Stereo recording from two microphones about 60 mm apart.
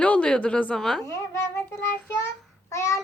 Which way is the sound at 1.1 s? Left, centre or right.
Left.